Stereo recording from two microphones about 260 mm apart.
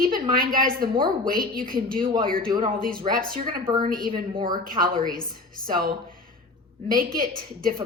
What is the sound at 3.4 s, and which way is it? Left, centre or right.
Speech, centre.